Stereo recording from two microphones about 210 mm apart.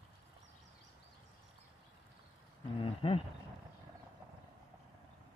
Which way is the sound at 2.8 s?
25° left (ahead or behind).